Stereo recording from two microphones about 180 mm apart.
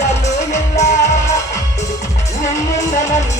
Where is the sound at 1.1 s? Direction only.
15° left (ahead or behind).